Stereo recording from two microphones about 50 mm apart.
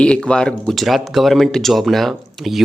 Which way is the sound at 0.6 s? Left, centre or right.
Centre.